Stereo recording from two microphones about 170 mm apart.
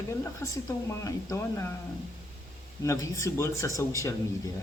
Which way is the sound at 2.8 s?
20° left (ahead or behind).